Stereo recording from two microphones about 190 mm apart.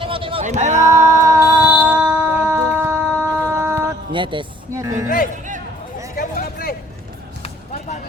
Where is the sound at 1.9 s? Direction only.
10° right (ahead or behind).